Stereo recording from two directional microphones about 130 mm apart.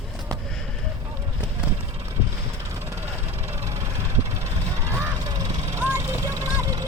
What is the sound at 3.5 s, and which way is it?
Vehicle, 25° right (ahead or behind).